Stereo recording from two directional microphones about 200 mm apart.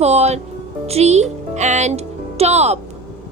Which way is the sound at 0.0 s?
35° right (ahead or behind).